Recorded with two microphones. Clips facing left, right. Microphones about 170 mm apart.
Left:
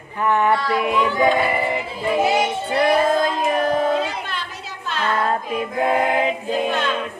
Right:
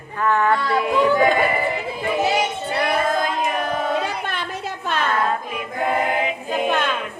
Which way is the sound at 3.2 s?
35° left (ahead or behind).